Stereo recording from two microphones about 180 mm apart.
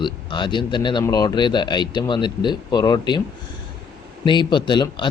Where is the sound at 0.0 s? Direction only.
25° left (ahead or behind).